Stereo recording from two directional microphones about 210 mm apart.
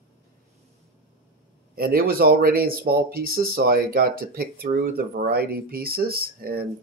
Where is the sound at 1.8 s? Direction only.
45° right (ahead or behind).